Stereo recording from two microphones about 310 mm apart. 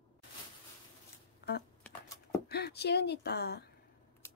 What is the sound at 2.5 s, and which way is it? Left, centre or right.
Speech, left.